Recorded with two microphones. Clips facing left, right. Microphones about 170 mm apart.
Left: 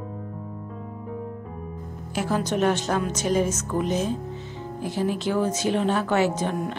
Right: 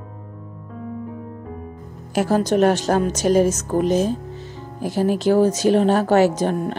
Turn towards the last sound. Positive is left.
turn(degrees=-35)  # may be behind; listen again after turning